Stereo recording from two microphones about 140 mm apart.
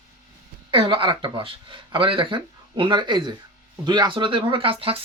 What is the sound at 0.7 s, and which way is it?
Speech, 35° right (ahead or behind).